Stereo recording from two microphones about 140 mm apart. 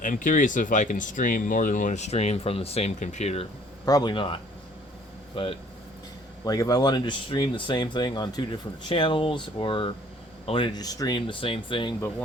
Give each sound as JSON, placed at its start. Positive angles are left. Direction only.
{"t": 0.0, "sound": "speech", "side_deg": 70}
{"t": 3.8, "sound": "speech", "side_deg": 30}
{"t": 6.4, "sound": "speech", "side_deg": 25}